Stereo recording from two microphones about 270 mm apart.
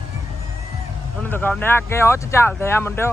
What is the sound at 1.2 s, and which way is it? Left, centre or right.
Speech, centre.